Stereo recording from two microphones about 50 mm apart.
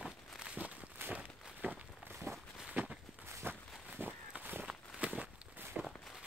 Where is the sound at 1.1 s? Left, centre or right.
Right.